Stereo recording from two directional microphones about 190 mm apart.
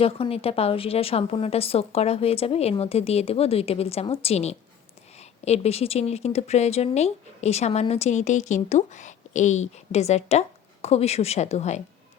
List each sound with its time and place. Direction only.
0.0 s speech: 30° left (ahead or behind)